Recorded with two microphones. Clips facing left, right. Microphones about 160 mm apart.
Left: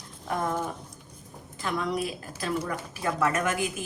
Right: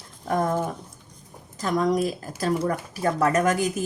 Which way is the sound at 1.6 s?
40° right (ahead or behind).